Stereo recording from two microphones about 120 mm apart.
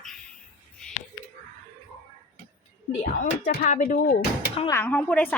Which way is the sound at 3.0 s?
90° left.